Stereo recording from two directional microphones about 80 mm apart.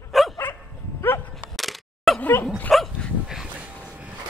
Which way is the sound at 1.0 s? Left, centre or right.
Left.